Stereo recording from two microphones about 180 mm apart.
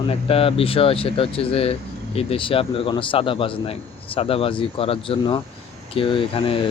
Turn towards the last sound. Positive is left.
turn(degrees=30)  # may be behind; listen again after turning